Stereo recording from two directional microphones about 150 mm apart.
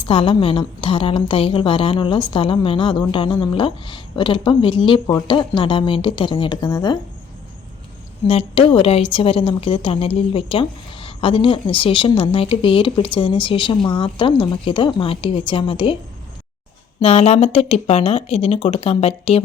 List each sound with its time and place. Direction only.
0.0 s a woman's voice: 35° left (ahead or behind)
8.3 s a woman's voice: 40° left (ahead or behind)
17.0 s a woman's voice: 45° left (ahead or behind)